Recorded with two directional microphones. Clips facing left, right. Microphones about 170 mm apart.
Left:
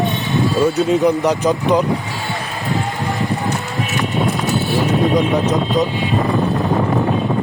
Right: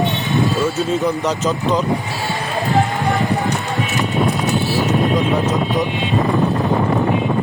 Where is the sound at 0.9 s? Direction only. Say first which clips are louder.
Left 4 dB; 15° left (ahead or behind).